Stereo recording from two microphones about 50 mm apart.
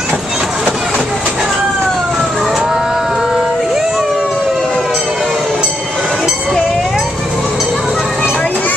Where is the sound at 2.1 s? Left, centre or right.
Centre.